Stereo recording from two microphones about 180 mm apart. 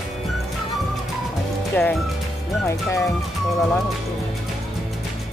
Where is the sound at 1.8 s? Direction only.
10° left (ahead or behind).